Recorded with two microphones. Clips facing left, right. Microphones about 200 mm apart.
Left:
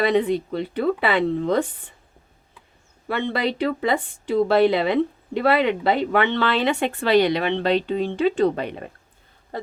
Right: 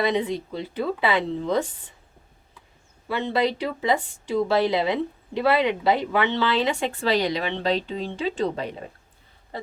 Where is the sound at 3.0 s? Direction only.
60° left (ahead or behind).